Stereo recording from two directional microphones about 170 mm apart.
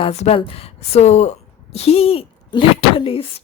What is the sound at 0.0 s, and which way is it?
Speech, 35° left (ahead or behind).